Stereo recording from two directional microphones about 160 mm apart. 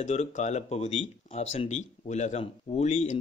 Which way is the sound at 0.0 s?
45° left (ahead or behind).